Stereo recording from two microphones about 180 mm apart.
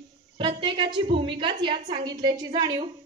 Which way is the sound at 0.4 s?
25° right (ahead or behind).